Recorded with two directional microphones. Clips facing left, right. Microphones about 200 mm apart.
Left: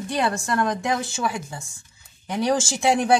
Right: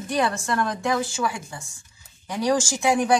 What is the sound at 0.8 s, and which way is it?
Speech, 20° left (ahead or behind).